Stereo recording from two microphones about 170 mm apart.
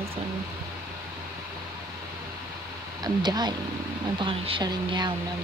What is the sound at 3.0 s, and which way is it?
Speech, 25° right (ahead or behind).